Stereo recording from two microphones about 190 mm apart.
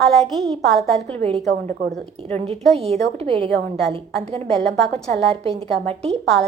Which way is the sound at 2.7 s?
35° right (ahead or behind).